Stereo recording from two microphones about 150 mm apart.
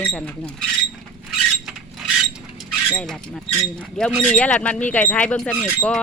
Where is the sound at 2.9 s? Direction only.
5° left (ahead or behind).